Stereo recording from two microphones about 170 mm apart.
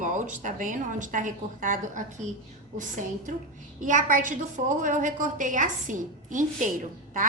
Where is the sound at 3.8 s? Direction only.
50° right (ahead or behind).